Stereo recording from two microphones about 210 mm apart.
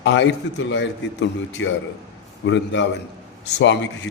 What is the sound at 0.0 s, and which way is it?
A man's voice, 55° left (ahead or behind).